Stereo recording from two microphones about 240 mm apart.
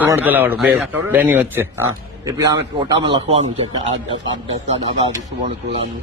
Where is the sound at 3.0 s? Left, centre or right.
Right.